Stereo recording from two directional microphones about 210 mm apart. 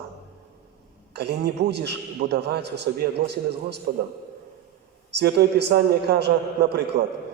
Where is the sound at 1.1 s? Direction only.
50° right (ahead or behind).